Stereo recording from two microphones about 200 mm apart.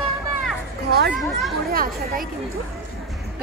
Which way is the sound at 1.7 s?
45° right (ahead or behind).